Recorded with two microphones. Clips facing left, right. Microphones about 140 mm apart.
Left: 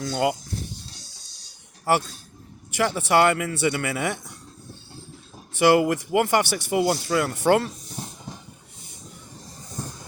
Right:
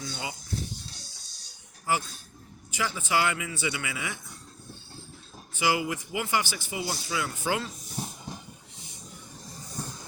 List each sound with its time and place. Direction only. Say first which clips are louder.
0.0 s speech: left 13 dB; 80° left
1.8 s speech: left 7 dB; 70° left (ahead or behind)
5.5 s speech: left 10 dB; 65° left (ahead or behind)
7.9 s train: even; 10° right (ahead or behind)